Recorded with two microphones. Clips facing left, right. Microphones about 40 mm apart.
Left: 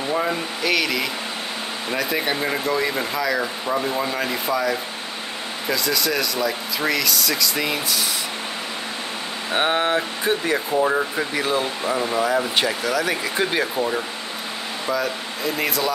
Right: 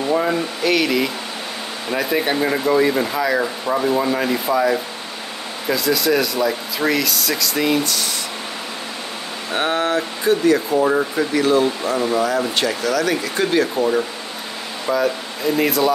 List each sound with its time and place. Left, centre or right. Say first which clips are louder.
0.1 s speech: right 4 dB; centre
9.5 s speech: right 1 dB; left
10.8 s speech: right 3 dB; centre
13.7 s speech: right 5 dB; centre